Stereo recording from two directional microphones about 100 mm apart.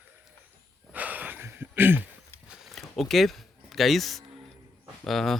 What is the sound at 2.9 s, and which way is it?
Speech, centre (ahead or behind).